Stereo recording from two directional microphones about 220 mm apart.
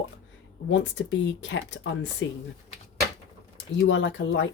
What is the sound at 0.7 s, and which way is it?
Speech, 55° left (ahead or behind).